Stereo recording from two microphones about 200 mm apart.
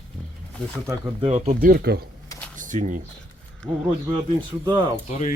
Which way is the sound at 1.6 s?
45° right (ahead or behind).